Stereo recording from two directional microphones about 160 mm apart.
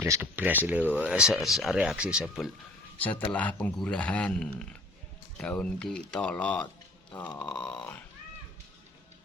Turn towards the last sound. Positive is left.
turn(degrees=5)  # may be behind; listen again after turning